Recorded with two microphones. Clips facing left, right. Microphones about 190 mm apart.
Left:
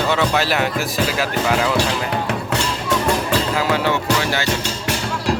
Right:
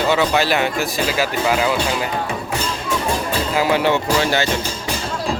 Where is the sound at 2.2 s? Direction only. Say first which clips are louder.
Left 2 dB; 70° left (ahead or behind).